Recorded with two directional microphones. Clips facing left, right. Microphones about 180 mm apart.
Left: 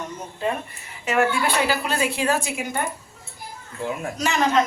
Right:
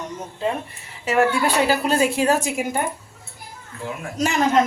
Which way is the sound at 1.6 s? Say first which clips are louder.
Right 4 dB; 40° right (ahead or behind).